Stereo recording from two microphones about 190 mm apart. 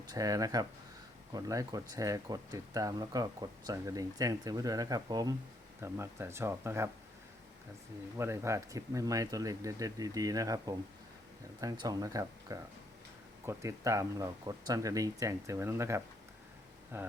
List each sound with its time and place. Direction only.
0.1 s speech: 20° right (ahead or behind)
8.1 s speech: 15° right (ahead or behind)